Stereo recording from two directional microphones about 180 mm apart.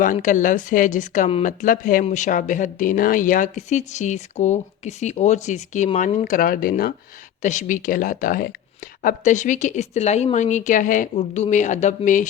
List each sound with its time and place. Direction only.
0.0 s speech: 45° left (ahead or behind)